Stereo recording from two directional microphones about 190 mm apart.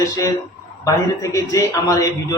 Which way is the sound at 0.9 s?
15° left (ahead or behind).